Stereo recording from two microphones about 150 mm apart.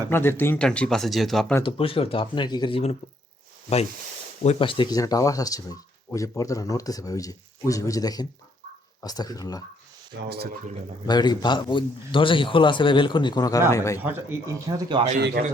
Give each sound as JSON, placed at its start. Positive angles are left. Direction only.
{"t": 0.1, "sound": "speech", "side_deg": 15}
{"t": 1.6, "sound": "a man's voice", "side_deg": 35}
{"t": 4.6, "sound": "speech", "side_deg": 35}
{"t": 10.2, "sound": "speech", "side_deg": -90}
{"t": 11.0, "sound": "a man's voice", "side_deg": 30}
{"t": 14.0, "sound": "speech", "side_deg": -15}